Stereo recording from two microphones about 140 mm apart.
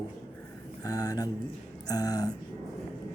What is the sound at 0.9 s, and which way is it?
Speech, 25° left (ahead or behind).